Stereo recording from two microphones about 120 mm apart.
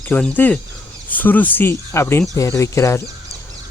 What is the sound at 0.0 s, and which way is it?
Speech, 15° left (ahead or behind).